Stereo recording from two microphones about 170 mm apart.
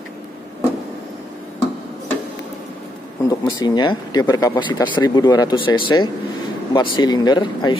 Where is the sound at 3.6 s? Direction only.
25° left (ahead or behind).